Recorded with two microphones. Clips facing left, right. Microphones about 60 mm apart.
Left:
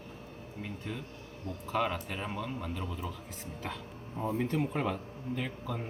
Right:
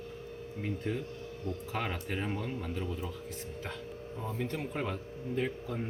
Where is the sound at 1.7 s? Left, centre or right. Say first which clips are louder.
Left 5 dB; right.